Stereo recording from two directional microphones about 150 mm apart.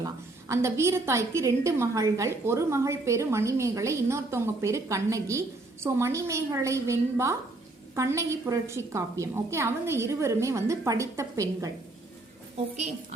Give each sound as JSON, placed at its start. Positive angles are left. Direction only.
{"t": 0.0, "sound": "a woman's voice", "side_deg": -20}